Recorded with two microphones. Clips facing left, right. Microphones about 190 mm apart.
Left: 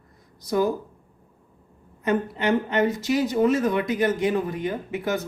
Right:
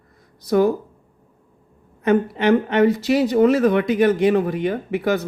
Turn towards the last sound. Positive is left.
turn(degrees=-65)  # may be behind; listen again after turning